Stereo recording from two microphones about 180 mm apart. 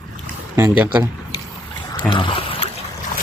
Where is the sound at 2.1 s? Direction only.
30° left (ahead or behind).